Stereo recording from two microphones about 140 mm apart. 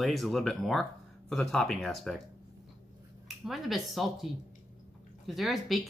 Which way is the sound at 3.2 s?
Centre (ahead or behind).